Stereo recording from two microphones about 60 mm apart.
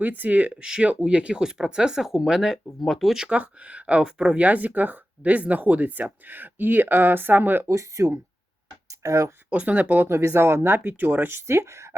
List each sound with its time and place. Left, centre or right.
0.0 s speech: right; by 3.2 s centre
3.2 s speech: right
7.7 s speech: right
8.9 s a sound: right
9.5 s speech: right
10.1 s speech: right